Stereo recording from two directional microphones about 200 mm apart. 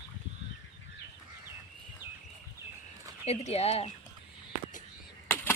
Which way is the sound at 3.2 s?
30° left (ahead or behind).